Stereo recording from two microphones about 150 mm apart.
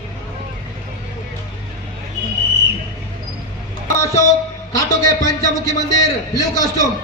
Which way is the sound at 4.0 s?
20° left (ahead or behind).